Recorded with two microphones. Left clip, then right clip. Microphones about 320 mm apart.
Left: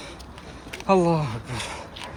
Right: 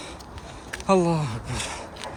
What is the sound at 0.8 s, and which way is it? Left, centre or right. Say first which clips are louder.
Gasp: left 1 dB; centre.